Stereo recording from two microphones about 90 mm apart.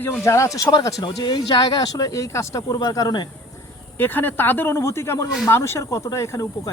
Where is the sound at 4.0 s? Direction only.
20° left (ahead or behind).